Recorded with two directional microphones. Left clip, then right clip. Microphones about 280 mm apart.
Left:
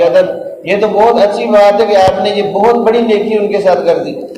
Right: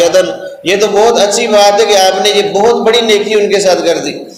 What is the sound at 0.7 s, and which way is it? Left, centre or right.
A man's voice, right.